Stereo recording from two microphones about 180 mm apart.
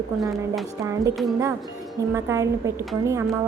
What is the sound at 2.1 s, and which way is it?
Speech, 15° right (ahead or behind).